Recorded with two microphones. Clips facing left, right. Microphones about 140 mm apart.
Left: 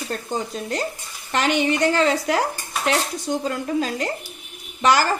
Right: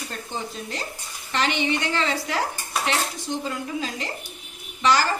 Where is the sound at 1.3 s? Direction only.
45° left (ahead or behind).